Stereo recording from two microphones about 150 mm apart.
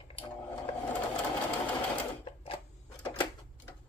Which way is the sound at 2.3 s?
40° left (ahead or behind).